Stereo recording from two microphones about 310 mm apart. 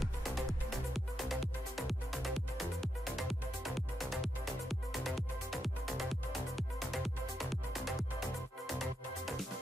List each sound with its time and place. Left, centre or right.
0.0 s music: centre